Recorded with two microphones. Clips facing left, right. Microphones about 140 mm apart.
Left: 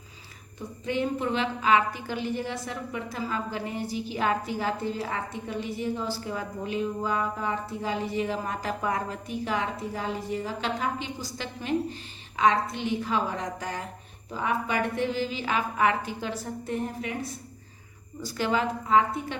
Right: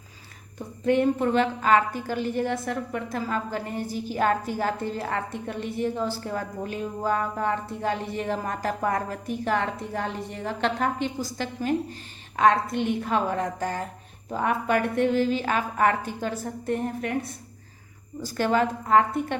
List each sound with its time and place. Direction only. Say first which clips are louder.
0.9 s a woman's voice: right 6 dB; 50° right (ahead or behind)